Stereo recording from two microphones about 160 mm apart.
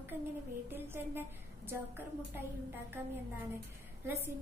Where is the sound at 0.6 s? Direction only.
15° right (ahead or behind).